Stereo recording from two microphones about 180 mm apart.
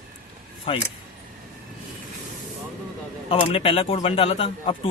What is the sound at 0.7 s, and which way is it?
Speech, 30° left (ahead or behind).